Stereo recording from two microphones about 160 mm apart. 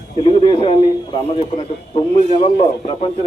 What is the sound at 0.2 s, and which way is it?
A man's voice, 35° left (ahead or behind).